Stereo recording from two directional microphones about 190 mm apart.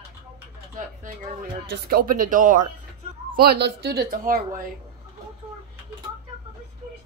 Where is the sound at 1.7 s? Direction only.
50° right (ahead or behind).